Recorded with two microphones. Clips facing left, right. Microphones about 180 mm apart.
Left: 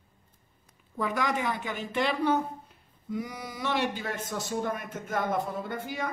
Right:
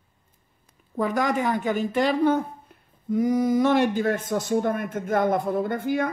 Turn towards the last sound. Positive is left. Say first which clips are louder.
# right 9 dB
turn(degrees=-55)  # may be behind; listen again after turning